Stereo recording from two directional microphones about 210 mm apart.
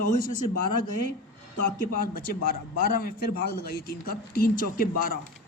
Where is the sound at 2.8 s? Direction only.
45° left (ahead or behind).